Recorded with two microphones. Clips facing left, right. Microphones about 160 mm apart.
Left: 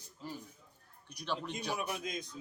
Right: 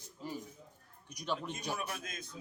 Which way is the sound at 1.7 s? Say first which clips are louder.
Left 3 dB; 15° left (ahead or behind).